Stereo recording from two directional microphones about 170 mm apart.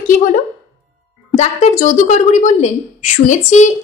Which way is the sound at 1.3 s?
40° left (ahead or behind).